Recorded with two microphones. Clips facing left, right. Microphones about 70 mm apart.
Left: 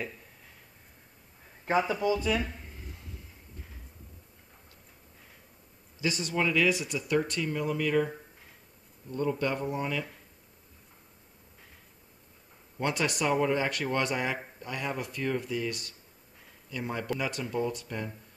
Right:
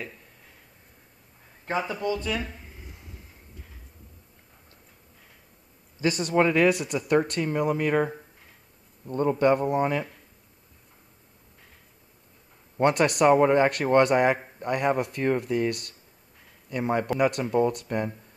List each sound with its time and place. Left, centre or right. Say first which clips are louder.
1.7 s speech: left 1 dB; centre
5.9 s speech: right 7 dB; right
12.7 s speech: right 8 dB; right